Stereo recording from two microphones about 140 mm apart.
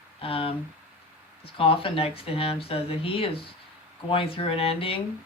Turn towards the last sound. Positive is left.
turn(degrees=40)  # may be behind; listen again after turning